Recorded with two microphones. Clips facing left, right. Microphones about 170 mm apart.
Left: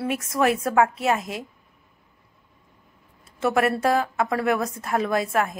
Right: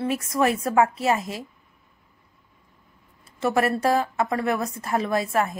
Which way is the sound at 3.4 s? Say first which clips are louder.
Left 1 dB; centre (ahead or behind).